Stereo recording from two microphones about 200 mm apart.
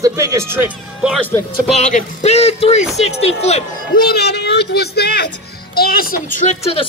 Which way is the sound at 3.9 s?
50° left (ahead or behind).